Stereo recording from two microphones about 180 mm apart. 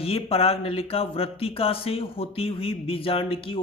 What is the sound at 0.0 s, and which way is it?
Speech, 30° left (ahead or behind).